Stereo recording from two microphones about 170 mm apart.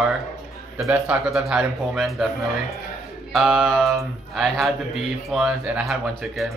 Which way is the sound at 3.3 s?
Centre (ahead or behind).